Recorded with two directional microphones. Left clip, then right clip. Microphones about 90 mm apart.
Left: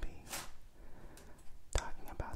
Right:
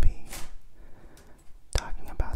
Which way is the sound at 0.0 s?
5° right (ahead or behind).